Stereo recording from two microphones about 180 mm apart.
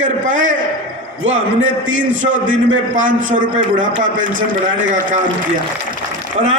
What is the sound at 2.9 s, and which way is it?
Speech, 45° right (ahead or behind).